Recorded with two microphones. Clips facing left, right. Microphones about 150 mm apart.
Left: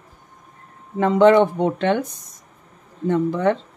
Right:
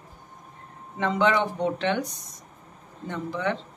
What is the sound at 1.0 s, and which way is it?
Speech, 45° left (ahead or behind).